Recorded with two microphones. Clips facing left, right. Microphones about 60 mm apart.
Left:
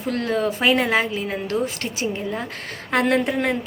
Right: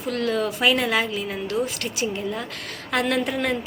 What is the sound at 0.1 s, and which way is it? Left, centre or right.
A woman's voice, left.